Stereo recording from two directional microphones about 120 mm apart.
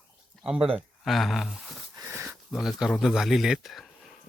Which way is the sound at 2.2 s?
5° right (ahead or behind).